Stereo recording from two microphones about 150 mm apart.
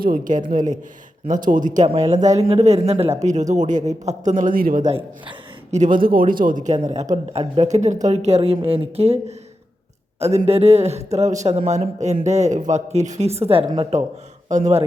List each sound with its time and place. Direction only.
0.0 s speech: 65° right (ahead or behind)
1.9 s a man's voice: 45° right (ahead or behind); by 4.9 s 70° right (ahead or behind)
4.9 s a woman's voice: 40° right (ahead or behind)
5.7 s a man's voice: 60° right (ahead or behind)